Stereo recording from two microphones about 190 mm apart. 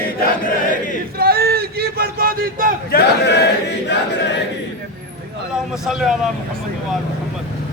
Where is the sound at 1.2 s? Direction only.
55° right (ahead or behind).